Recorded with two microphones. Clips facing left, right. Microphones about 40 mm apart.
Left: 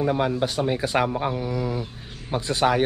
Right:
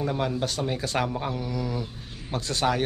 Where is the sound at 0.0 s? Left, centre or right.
Centre.